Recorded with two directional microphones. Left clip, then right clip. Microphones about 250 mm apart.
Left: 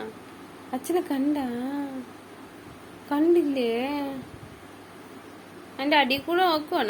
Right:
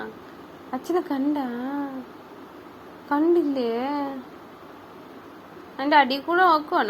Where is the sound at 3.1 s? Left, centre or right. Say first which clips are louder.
Right 1 dB; centre.